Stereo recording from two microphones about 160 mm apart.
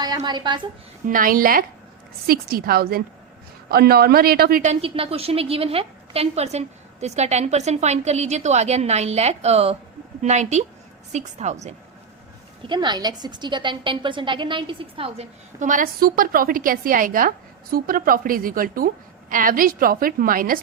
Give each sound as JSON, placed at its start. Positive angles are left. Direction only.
{"t": 0.0, "sound": "a woman's voice", "side_deg": -25}
{"t": 1.0, "sound": "a woman's voice", "side_deg": -60}
{"t": 4.6, "sound": "a woman's voice", "side_deg": -40}
{"t": 12.6, "sound": "a woman's voice", "side_deg": -30}
{"t": 15.5, "sound": "a woman's voice", "side_deg": -55}